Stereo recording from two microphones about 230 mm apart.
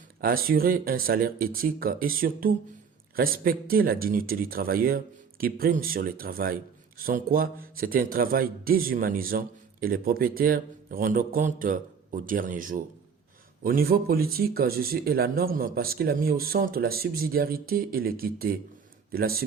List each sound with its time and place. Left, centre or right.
0.2 s speech: right